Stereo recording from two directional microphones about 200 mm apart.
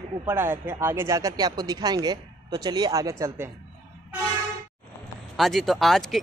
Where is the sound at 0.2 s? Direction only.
10° right (ahead or behind).